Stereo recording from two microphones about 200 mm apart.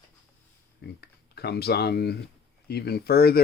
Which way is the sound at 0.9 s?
55° left (ahead or behind).